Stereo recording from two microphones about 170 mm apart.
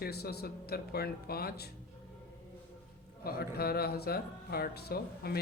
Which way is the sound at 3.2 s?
65° left (ahead or behind).